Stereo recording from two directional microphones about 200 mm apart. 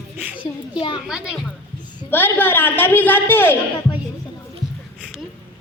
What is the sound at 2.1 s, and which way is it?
A child's voice, 10° left (ahead or behind).